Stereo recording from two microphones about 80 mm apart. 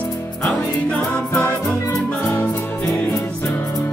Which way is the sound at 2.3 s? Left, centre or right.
Left.